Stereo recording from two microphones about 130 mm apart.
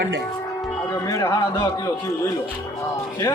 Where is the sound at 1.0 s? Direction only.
25° left (ahead or behind).